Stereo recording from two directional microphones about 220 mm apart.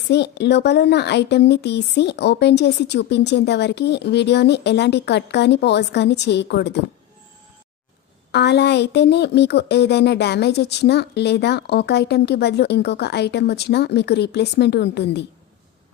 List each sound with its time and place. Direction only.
0.1 s speech: 50° left (ahead or behind)
8.3 s speech: 50° left (ahead or behind)